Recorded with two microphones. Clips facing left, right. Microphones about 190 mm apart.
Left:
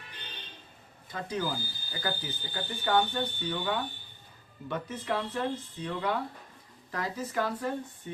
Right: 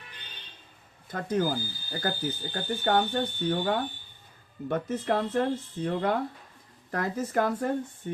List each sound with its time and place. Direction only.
1.1 s speech: 50° right (ahead or behind)